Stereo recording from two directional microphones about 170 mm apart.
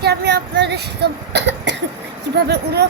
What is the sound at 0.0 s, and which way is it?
Speech, 80° right.